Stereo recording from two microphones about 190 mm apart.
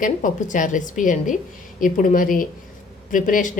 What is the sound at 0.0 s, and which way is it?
A woman's voice, 45° left (ahead or behind).